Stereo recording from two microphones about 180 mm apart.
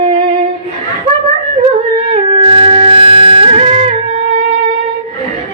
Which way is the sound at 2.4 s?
30° right (ahead or behind).